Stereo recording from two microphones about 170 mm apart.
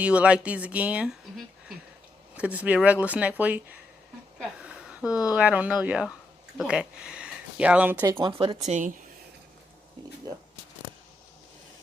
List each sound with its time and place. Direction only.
0.0 s speech: 5° right (ahead or behind)
2.3 s speech: 5° right (ahead or behind)
4.4 s a sound: 5° right (ahead or behind)
5.3 s speech: 10° right (ahead or behind)
8.0 s speech: 20° right (ahead or behind)
8.3 s speech: 35° right (ahead or behind)
8.6 s speech: 45° right (ahead or behind)